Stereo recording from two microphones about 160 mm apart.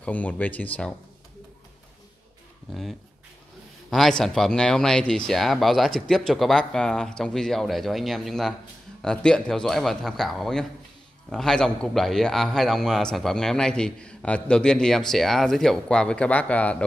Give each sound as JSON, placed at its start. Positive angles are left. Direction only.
{"t": 0.0, "sound": "speech", "side_deg": 10}
{"t": 2.7, "sound": "a man's voice", "side_deg": 0}